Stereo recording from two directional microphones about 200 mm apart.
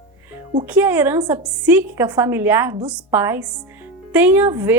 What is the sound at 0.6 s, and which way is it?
Speech, 10° right (ahead or behind).